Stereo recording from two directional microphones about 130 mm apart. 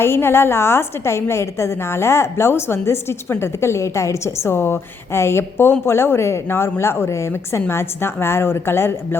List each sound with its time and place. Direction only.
0.0 s a woman's voice: 20° left (ahead or behind)